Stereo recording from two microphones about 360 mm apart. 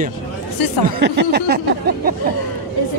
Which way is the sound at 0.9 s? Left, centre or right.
Right.